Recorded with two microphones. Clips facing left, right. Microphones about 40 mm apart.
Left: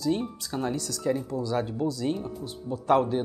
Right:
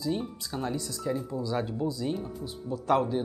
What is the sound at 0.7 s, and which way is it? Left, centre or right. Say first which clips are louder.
Speech: left 3 dB; left.